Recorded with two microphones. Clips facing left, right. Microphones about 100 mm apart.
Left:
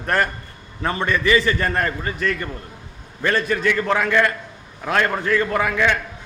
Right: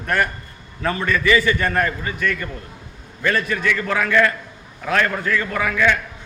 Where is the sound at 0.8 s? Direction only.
25° left (ahead or behind).